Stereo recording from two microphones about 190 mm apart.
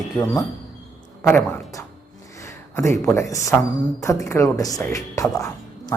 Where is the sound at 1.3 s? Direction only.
15° left (ahead or behind).